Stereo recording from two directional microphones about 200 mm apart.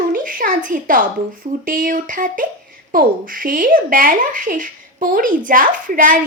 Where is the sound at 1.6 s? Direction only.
45° right (ahead or behind).